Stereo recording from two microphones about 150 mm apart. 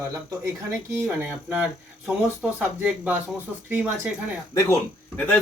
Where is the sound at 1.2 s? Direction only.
10° right (ahead or behind).